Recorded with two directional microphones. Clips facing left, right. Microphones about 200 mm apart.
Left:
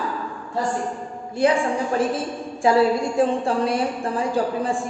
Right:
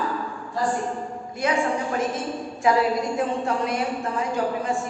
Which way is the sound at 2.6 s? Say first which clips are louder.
Left 3 dB; 30° left (ahead or behind).